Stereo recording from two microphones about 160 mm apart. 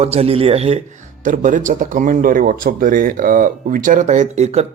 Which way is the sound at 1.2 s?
55° right (ahead or behind).